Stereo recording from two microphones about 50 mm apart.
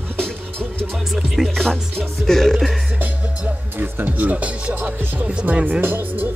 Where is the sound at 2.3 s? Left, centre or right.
Centre.